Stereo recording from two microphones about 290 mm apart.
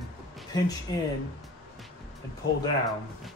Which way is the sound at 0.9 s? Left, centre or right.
Centre.